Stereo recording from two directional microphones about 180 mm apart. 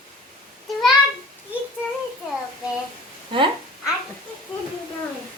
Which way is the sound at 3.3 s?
25° right (ahead or behind).